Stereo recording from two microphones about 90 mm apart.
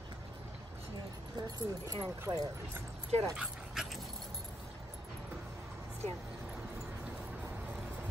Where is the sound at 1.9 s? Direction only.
45° right (ahead or behind).